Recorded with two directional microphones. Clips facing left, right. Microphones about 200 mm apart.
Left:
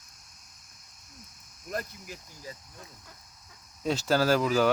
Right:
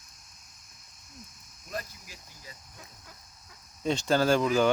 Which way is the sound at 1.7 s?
50° left (ahead or behind).